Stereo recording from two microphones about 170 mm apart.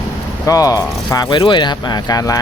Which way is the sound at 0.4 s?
20° left (ahead or behind).